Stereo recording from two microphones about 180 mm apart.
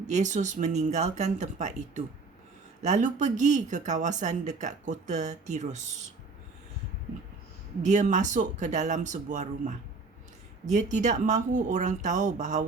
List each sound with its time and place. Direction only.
0.1 s speech: 45° right (ahead or behind)
7.8 s speech: 40° right (ahead or behind)